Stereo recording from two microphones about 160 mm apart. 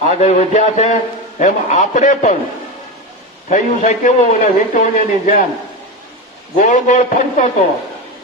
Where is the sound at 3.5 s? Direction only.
45° left (ahead or behind).